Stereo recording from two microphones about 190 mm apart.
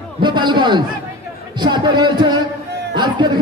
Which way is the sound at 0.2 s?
25° right (ahead or behind).